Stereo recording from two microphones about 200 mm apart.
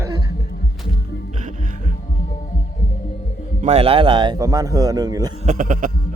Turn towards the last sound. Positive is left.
turn(degrees=-40)  # may be behind; listen again after turning